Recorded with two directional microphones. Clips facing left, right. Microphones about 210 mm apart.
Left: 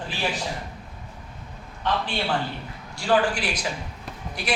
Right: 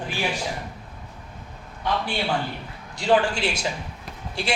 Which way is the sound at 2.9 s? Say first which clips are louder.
Right 1 dB; 25° right (ahead or behind).